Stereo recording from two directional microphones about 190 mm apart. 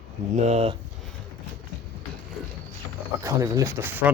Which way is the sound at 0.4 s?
35° right (ahead or behind).